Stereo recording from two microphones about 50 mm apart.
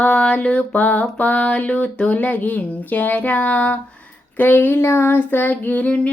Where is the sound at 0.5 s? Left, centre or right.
Left.